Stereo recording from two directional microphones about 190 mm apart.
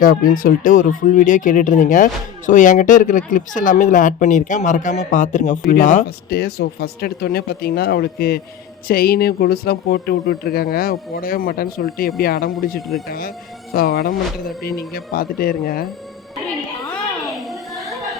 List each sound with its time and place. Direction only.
0.0 s speech: 50° left (ahead or behind)
16.9 s children playing: centre (ahead or behind)